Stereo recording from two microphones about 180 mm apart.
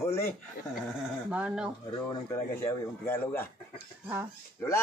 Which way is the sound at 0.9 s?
5° right (ahead or behind).